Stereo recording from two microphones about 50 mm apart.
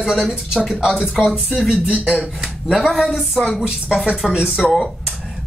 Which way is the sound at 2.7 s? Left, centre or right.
Centre.